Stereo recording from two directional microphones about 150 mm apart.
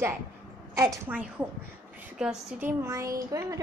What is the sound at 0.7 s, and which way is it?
Speech, 20° right (ahead or behind).